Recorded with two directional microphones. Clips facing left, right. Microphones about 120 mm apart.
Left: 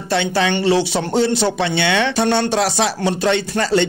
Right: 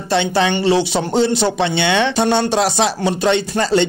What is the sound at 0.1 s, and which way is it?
Speech, 25° right (ahead or behind).